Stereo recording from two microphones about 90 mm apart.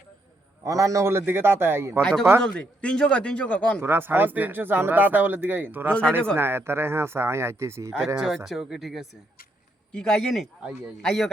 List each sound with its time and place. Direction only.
0.6 s speech: 40° right (ahead or behind)
2.0 s a man's voice: 10° left (ahead or behind)
3.8 s speech: 25° right (ahead or behind)
5.9 s a man's voice: 10° left (ahead or behind)
6.3 s speech: 25° right (ahead or behind)
8.4 s a man's voice: 5° right (ahead or behind)